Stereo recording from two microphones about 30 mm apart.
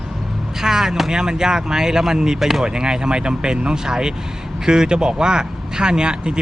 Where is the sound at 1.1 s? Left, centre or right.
Right.